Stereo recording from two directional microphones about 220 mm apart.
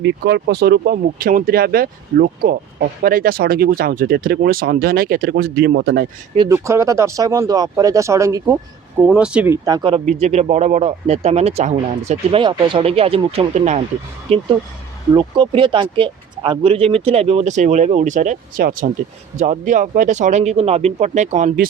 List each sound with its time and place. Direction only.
0.0 s speech: 50° right (ahead or behind)
6.3 s speech: 15° right (ahead or behind)
9.0 s speech: 5° right (ahead or behind)
9.6 s speech: 20° right (ahead or behind); by 21.7 s 35° right (ahead or behind)